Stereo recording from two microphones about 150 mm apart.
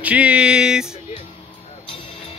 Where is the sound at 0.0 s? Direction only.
10° right (ahead or behind).